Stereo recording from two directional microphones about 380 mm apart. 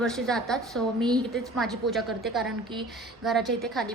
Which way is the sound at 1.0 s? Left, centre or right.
Centre.